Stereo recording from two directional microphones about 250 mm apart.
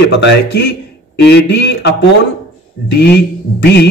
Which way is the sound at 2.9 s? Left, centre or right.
Left.